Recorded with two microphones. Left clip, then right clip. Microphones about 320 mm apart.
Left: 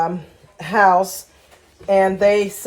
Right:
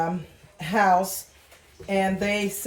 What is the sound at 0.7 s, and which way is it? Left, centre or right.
Speech, left.